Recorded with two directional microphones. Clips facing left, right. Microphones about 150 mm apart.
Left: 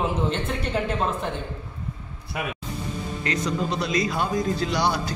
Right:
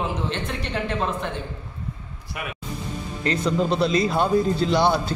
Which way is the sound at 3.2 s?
30° right (ahead or behind).